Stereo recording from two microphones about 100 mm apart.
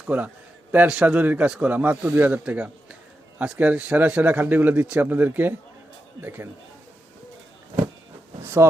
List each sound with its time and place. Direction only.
0.1 s a man's voice: 10° right (ahead or behind)
3.3 s a man's voice: 10° right (ahead or behind)